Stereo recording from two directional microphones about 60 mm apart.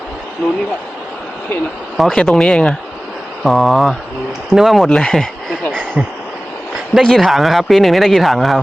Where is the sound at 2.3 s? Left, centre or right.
Centre.